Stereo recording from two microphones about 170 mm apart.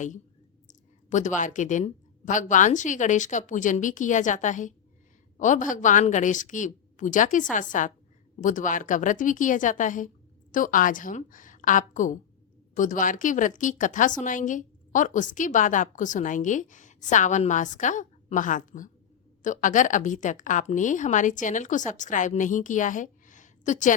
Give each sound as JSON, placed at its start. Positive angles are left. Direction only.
{"t": 0.7, "sound": "a woman's voice", "side_deg": 45}